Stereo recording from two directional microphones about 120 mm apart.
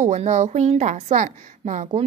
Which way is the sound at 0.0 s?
70° right (ahead or behind).